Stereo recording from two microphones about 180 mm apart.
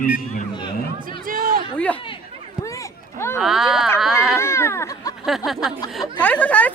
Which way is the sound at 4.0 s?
Centre (ahead or behind).